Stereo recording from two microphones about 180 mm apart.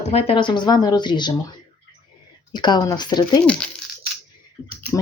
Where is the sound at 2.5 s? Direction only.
25° left (ahead or behind).